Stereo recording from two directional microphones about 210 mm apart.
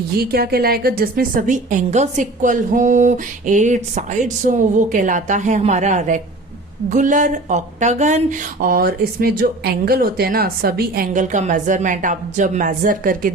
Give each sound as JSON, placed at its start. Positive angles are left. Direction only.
{"t": 0.2, "sound": "speech", "side_deg": -45}